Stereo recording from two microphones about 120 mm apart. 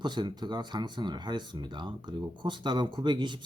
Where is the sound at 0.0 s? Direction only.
40° right (ahead or behind).